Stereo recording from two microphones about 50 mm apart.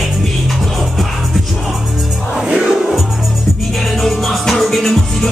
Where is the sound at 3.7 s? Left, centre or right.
Centre.